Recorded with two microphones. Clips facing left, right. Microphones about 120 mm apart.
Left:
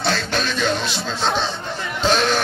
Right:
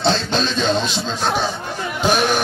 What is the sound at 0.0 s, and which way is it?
Speech, 20° right (ahead or behind).